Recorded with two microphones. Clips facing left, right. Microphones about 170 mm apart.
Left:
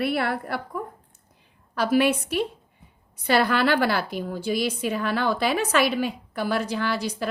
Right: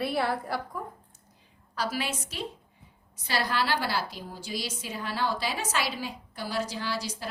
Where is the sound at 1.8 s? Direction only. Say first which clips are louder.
Left 11 dB; 60° left (ahead or behind).